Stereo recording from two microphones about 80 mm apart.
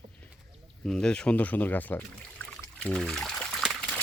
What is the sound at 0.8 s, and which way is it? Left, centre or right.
Speech, centre.